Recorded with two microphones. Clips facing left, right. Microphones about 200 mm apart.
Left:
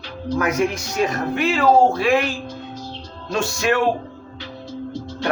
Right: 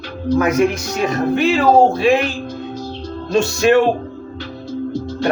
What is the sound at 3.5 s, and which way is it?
Speech, 25° right (ahead or behind).